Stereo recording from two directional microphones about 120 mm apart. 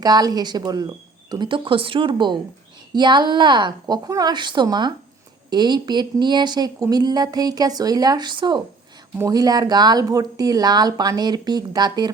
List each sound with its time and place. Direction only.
0.0 s speech: 35° right (ahead or behind)